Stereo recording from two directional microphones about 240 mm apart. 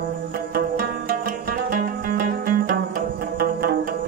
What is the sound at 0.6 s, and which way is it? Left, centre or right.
Music, right.